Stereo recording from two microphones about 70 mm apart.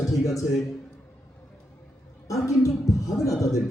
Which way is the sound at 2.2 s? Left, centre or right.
Left.